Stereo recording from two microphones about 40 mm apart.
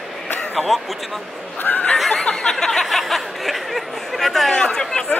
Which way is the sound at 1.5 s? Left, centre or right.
Left.